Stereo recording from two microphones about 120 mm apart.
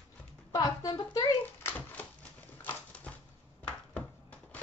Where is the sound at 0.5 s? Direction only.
30° left (ahead or behind).